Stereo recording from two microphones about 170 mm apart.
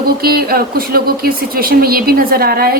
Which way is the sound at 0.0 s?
60° right (ahead or behind).